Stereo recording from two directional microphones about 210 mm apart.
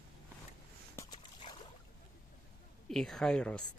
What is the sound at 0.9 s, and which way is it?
Dog, 15° left (ahead or behind).